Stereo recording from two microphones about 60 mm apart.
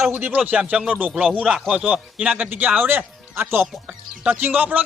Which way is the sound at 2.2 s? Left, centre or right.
Right.